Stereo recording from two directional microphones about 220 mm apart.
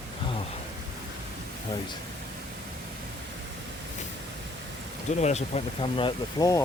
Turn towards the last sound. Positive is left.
turn(degrees=15)  # may be behind; listen again after turning